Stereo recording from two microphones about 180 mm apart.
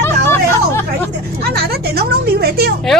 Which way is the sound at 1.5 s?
60° right (ahead or behind).